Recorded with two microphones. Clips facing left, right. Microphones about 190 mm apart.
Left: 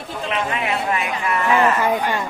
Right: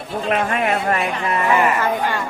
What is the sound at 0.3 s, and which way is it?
Speech, 50° right (ahead or behind).